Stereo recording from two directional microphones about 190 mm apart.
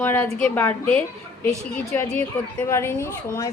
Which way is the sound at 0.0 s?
10° left (ahead or behind).